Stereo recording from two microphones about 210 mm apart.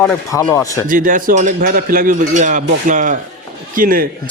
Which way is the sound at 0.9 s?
40° right (ahead or behind).